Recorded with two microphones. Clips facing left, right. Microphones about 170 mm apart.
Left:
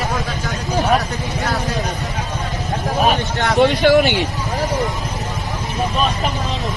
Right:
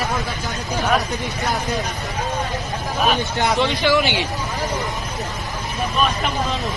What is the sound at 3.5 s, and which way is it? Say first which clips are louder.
Speech: left 8 dB; 50° left (ahead or behind).